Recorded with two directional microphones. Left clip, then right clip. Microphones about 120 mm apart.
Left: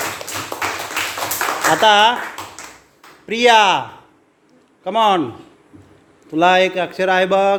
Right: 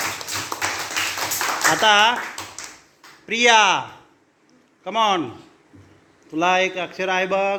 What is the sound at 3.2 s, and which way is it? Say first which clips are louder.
Speech: left 3 dB; 30° left (ahead or behind).